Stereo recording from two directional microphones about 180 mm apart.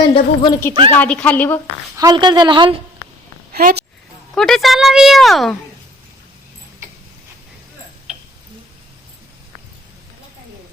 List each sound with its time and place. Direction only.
0.1 s speech: 25° left (ahead or behind)
0.9 s a woman's voice: 10° left (ahead or behind)
2.0 s a woman's voice: 25° right (ahead or behind)
3.5 s a sound: 55° right (ahead or behind)
4.4 s a woman's voice: centre (ahead or behind)
8.1 s tick: 5° right (ahead or behind)